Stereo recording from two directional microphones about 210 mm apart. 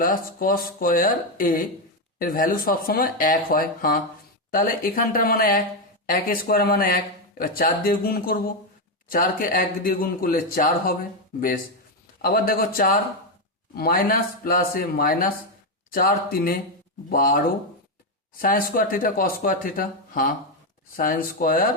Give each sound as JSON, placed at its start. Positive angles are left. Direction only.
{"t": 0.0, "sound": "speech", "side_deg": 40}